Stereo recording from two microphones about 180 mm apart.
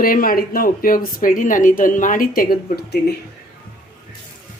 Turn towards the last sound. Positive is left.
turn(degrees=60)  # may be behind; listen again after turning